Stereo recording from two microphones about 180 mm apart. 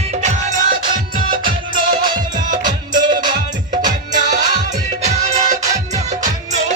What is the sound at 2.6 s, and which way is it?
Music, 25° right (ahead or behind).